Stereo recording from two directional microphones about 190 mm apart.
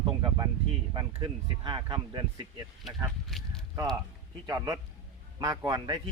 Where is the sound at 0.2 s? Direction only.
20° right (ahead or behind).